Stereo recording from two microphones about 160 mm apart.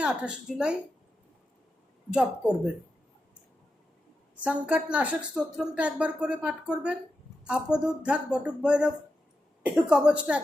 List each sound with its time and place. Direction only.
0.0 s speech: 5° right (ahead or behind)
2.1 s speech: 5° right (ahead or behind)
4.4 s speech: 10° right (ahead or behind)